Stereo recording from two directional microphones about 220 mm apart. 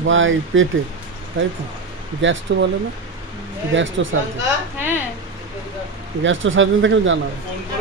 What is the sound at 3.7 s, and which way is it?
Speech, 60° right (ahead or behind).